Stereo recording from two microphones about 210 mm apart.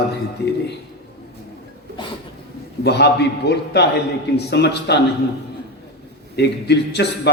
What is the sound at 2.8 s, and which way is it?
A man's voice, 50° left (ahead or behind).